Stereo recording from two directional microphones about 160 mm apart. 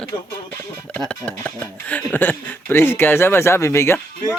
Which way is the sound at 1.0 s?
5° left (ahead or behind).